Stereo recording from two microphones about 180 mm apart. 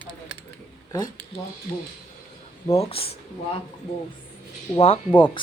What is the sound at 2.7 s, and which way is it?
Speech, 35° left (ahead or behind).